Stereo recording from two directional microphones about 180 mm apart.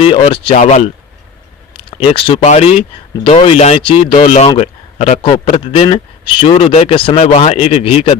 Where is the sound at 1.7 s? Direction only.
30° left (ahead or behind).